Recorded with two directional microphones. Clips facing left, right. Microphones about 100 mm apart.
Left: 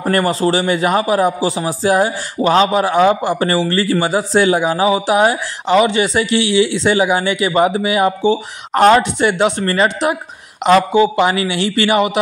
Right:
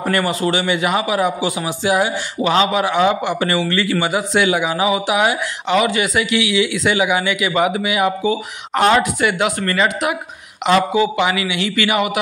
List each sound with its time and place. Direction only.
0.0 s a man's voice: 35° left (ahead or behind)